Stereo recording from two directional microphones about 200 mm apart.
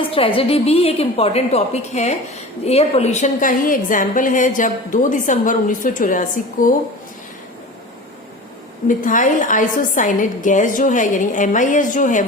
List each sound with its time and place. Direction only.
0.1 s a woman's voice: 25° left (ahead or behind)
8.9 s a woman's voice: 40° left (ahead or behind)